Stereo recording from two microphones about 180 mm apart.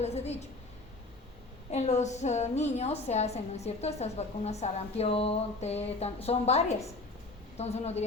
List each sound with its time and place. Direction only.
0.0 s a woman's voice: 35° left (ahead or behind)
1.7 s a woman's voice: 40° left (ahead or behind)